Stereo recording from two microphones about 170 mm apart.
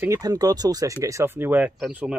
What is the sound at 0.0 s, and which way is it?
Speech, 20° right (ahead or behind).